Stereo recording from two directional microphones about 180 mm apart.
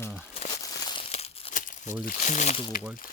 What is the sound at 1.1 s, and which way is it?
Crumpling, 35° left (ahead or behind).